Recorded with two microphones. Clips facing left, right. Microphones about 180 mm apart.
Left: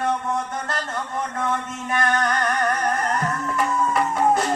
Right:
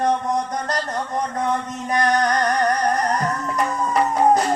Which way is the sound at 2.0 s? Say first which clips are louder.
Right 3 dB; 40° right (ahead or behind).